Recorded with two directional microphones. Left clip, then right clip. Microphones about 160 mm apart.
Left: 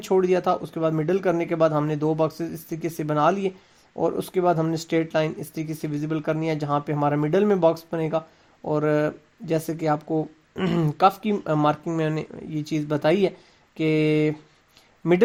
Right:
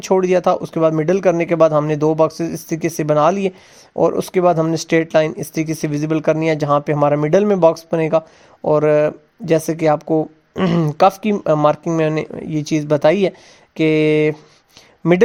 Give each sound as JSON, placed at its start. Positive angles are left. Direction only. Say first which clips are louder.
{"t": 0.0, "sound": "a man's voice", "louder": "right 6 dB", "side_deg": -45}